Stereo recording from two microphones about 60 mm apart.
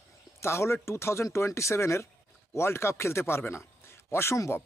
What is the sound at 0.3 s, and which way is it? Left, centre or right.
Speech, left.